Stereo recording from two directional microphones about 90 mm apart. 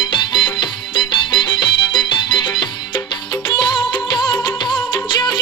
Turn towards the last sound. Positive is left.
turn(degrees=50)  # may be behind; listen again after turning